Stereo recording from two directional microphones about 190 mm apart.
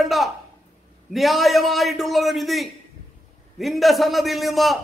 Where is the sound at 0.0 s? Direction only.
Centre (ahead or behind).